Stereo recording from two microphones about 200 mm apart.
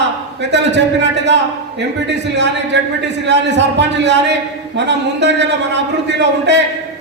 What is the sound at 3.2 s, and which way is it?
A man's voice, 60° right (ahead or behind).